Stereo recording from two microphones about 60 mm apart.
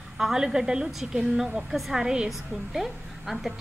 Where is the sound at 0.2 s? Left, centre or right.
Centre.